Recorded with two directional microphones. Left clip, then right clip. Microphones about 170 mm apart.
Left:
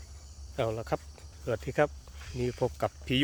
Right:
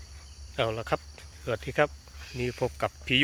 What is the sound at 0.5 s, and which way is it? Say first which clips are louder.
Speech: right 3 dB; 5° left (ahead or behind).